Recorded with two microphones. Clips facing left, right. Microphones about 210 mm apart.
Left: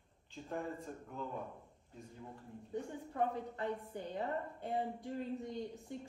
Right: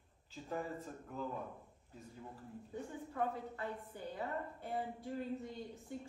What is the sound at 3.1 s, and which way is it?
A woman's voice, 20° left (ahead or behind).